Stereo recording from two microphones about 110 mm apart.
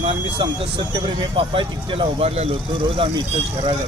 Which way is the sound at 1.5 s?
55° right (ahead or behind).